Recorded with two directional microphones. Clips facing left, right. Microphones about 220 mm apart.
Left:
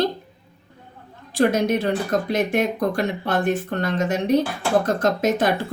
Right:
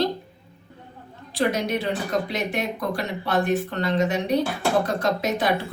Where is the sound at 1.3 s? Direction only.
50° left (ahead or behind).